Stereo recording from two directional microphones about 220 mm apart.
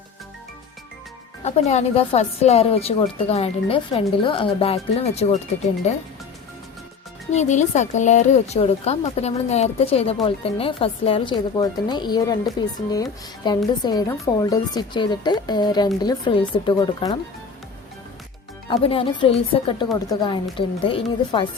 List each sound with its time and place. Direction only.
1.5 s speech: 30° left (ahead or behind)
7.3 s speech: 30° left (ahead or behind); by 17.2 s 15° left (ahead or behind)
18.7 s speech: 25° left (ahead or behind)